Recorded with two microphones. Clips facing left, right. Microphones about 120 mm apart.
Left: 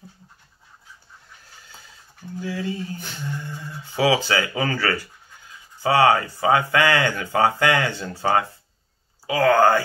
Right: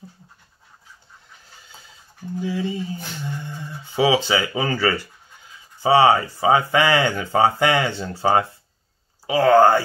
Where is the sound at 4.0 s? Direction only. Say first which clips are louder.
Right 1 dB; 20° right (ahead or behind).